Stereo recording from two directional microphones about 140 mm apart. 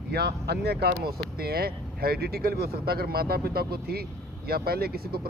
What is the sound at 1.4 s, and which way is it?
Speech, 90° right.